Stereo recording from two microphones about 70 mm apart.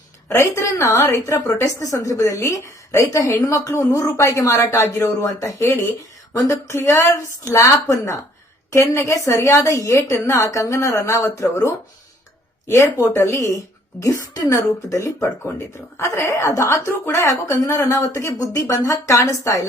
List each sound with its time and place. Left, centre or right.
0.3 s a woman's voice: left
7.2 s a woman's voice: left
17.5 s speech: left
17.8 s a woman's voice: left